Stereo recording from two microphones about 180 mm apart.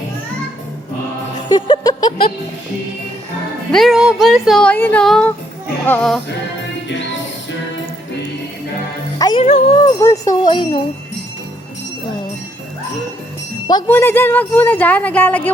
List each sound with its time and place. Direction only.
1.5 s music: 25° left (ahead or behind)
3.7 s a woman's voice: centre (ahead or behind)
9.1 s music: 20° left (ahead or behind)
9.4 s speech: 35° left (ahead or behind)
10.0 s music: 20° left (ahead or behind)
13.8 s a woman's voice: 10° left (ahead or behind)